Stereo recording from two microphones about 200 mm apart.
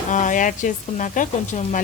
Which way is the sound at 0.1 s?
40° left (ahead or behind).